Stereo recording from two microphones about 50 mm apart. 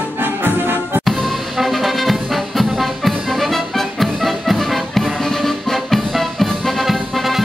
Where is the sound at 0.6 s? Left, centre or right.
Right.